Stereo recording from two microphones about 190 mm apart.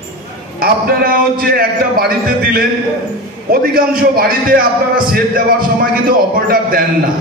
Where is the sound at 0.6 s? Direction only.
50° right (ahead or behind).